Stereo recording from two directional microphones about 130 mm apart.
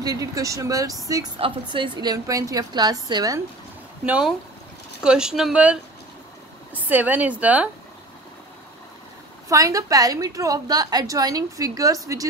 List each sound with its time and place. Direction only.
0.0 s a woman's voice: 25° right (ahead or behind)
1.4 s a woman's voice: 40° right (ahead or behind)
4.0 s a woman's voice: 10° right (ahead or behind)
6.9 s a woman's voice: 15° right (ahead or behind)
9.5 s a woman's voice: 25° right (ahead or behind)